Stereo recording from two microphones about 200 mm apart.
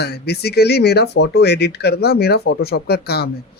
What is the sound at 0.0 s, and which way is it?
Speech, 55° left (ahead or behind).